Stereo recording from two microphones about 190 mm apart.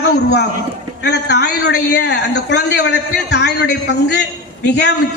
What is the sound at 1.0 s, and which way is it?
A man's voice, 60° left (ahead or behind).